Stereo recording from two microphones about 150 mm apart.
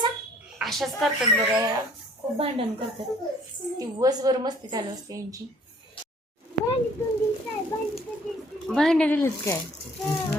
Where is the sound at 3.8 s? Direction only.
25° right (ahead or behind).